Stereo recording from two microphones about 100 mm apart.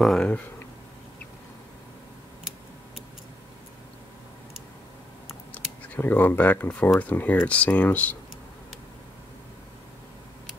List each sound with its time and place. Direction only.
0.0 s speech: 5° left (ahead or behind)
5.5 s speech: 20° left (ahead or behind)